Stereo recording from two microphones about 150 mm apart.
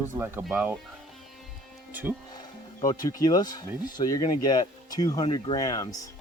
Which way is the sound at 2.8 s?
25° left (ahead or behind).